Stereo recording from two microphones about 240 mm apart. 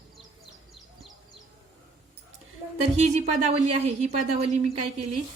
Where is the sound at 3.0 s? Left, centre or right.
Right.